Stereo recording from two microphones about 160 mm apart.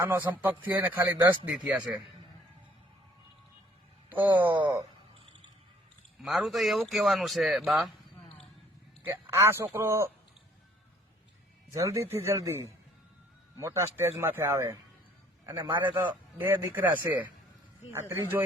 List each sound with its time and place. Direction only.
0.0 s a man's voice: 10° right (ahead or behind)
4.1 s a man's voice: 10° right (ahead or behind)
6.2 s speech: centre (ahead or behind)
9.0 s a man's voice: 15° right (ahead or behind)
11.7 s a man's voice: 20° right (ahead or behind)